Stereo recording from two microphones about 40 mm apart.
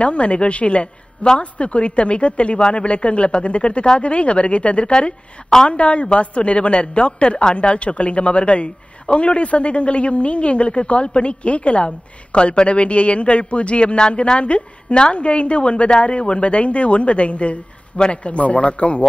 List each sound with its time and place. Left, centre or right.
0.0 s a woman's voice: left